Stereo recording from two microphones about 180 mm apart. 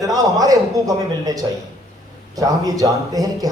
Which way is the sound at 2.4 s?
20° right (ahead or behind).